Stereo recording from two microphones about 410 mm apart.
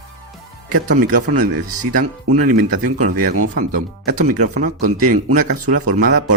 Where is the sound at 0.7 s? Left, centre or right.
Right.